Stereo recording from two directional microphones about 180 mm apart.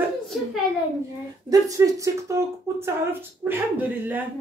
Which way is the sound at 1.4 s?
20° right (ahead or behind).